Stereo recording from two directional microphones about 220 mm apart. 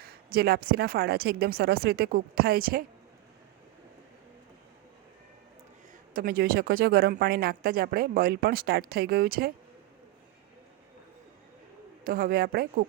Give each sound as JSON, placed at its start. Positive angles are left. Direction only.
{"t": 0.0, "sound": "speech", "side_deg": -45}
{"t": 6.1, "sound": "speech", "side_deg": -45}
{"t": 12.0, "sound": "speech", "side_deg": -40}